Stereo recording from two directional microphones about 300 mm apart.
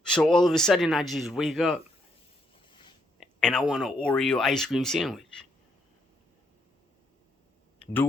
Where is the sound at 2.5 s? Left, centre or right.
Centre.